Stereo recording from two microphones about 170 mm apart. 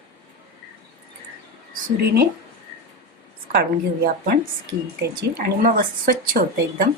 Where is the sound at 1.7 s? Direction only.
60° right (ahead or behind).